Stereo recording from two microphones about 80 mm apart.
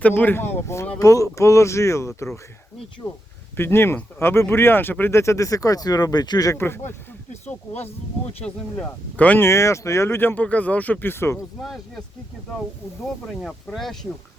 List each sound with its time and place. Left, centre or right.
0.0 s speech: left
0.9 s speech: left
3.6 s speech: left
6.6 s speech: left
8.4 s speech: centre
9.4 s speech: left
11.6 s speech: centre
13.2 s speech: centre